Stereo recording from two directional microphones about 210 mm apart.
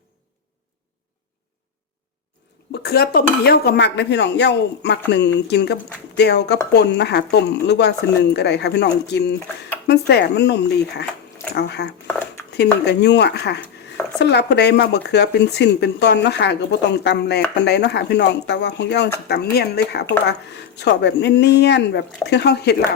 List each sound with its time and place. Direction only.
2.8 s speech: 50° left (ahead or behind)